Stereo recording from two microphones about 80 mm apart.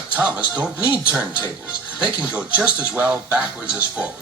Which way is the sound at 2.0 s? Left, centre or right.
Centre.